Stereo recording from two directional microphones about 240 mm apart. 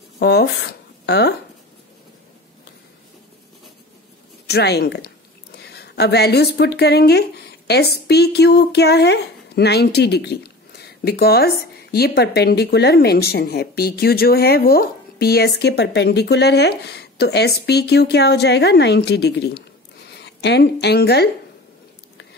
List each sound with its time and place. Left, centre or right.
0.2 s speech: left
4.5 s a woman's voice: left